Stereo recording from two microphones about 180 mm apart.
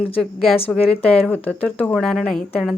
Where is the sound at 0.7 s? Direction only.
10° left (ahead or behind).